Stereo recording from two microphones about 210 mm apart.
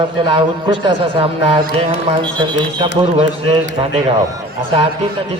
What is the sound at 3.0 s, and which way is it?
Speech, 30° right (ahead or behind).